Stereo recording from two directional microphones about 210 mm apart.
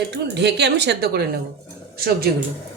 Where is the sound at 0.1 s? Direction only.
55° right (ahead or behind).